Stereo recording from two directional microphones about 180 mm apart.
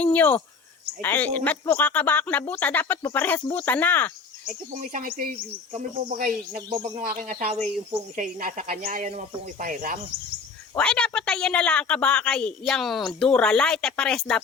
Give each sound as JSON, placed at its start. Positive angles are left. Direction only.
{"t": 0.0, "sound": "speech", "side_deg": 10}
{"t": 4.4, "sound": "speech", "side_deg": -45}
{"t": 10.8, "sound": "a woman's voice", "side_deg": 5}